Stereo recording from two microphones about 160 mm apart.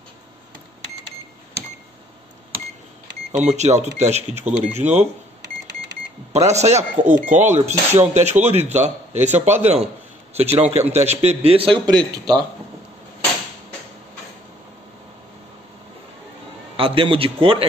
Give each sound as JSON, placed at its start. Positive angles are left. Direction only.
{"t": 3.3, "sound": "speech", "side_deg": -45}
{"t": 6.3, "sound": "a man's voice", "side_deg": -45}
{"t": 16.7, "sound": "a man's voice", "side_deg": -35}